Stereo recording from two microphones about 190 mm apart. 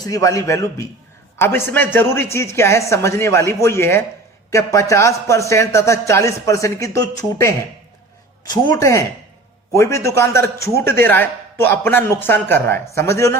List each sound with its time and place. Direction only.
0.0 s a man's voice: 15° left (ahead or behind)